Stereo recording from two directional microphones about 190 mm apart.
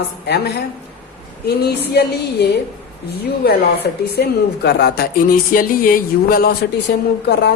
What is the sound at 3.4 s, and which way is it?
Speech, 55° left (ahead or behind).